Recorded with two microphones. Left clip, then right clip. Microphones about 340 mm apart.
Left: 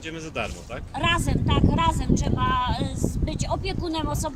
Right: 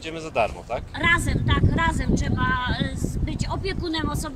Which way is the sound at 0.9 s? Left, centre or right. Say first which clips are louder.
Right 2 dB; centre.